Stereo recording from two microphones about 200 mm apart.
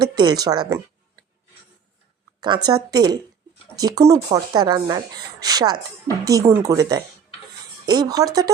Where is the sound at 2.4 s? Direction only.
20° right (ahead or behind).